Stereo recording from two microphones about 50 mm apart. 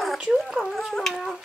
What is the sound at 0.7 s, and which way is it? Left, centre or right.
Wind instrument, centre.